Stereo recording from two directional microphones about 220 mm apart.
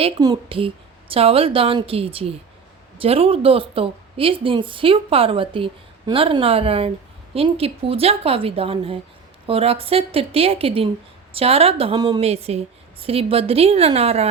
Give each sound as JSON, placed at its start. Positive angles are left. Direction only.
{"t": 0.0, "sound": "a woman's voice", "side_deg": -20}
{"t": 12.2, "sound": "a woman's voice", "side_deg": -30}